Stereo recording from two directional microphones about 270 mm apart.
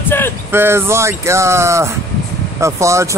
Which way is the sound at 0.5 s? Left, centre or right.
Centre.